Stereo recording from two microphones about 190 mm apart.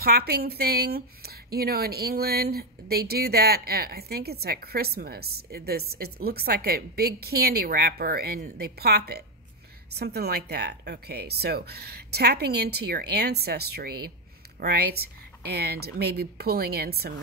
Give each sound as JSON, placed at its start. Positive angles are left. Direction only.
{"t": 0.0, "sound": "speech", "side_deg": -55}